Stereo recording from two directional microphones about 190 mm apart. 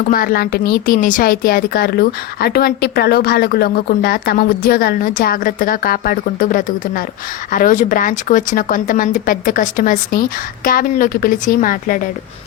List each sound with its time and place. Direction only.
0.1 s speech: 50° left (ahead or behind)